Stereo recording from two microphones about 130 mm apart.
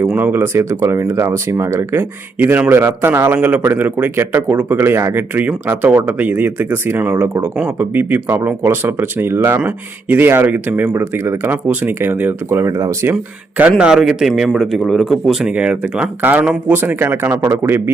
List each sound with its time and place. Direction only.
0.0 s a man's voice: 10° right (ahead or behind)
13.6 s a man's voice: 10° right (ahead or behind)